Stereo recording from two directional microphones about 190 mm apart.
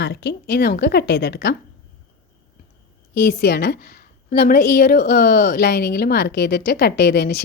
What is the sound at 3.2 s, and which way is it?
A woman's voice, 60° left (ahead or behind).